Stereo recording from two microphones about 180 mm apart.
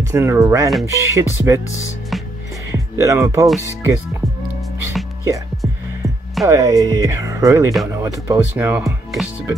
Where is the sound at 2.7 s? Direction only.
15° right (ahead or behind).